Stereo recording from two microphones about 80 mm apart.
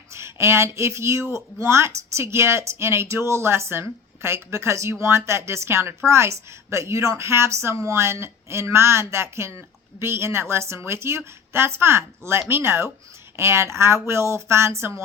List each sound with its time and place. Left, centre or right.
0.1 s speech: right